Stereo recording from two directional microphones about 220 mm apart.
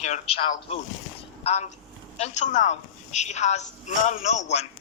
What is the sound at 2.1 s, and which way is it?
A woman's voice, 30° left (ahead or behind).